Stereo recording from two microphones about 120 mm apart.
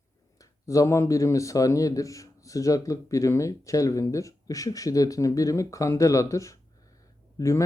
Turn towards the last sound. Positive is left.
turn(degrees=25)  # may be behind; listen again after turning